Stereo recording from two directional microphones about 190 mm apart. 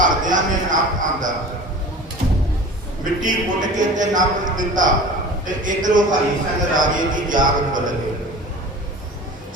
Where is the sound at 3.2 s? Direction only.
40° right (ahead or behind).